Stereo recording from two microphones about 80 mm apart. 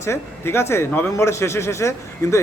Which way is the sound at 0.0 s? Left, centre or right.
Left.